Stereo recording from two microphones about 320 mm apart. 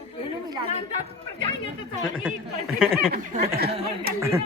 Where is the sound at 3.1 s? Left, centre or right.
Right.